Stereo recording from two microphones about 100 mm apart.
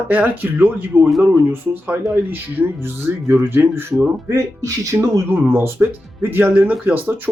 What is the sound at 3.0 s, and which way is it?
Speech, 20° right (ahead or behind).